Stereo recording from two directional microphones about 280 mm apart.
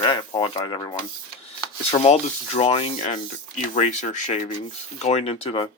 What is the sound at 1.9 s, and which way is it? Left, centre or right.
Rub, left.